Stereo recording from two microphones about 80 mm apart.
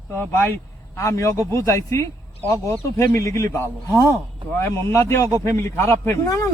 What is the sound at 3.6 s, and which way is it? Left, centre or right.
Speech, right.